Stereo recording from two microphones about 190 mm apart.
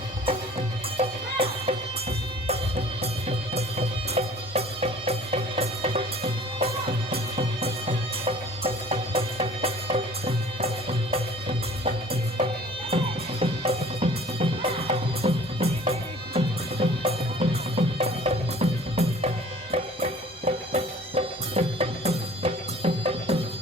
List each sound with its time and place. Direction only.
0.9 s music: 30° right (ahead or behind)
13.4 s music: 30° right (ahead or behind)